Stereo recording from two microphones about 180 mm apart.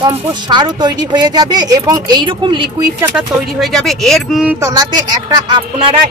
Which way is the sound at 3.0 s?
Centre (ahead or behind).